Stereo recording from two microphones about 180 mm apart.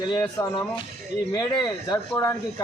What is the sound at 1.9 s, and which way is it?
Speech, 15° left (ahead or behind).